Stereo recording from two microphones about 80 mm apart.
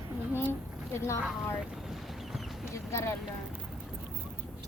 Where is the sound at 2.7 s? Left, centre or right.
Left.